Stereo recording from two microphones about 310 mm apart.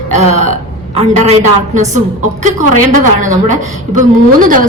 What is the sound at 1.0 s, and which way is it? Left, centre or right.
A woman's voice, centre.